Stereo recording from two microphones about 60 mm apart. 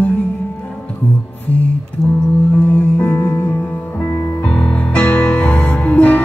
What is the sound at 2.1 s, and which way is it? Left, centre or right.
Singing bowl, left.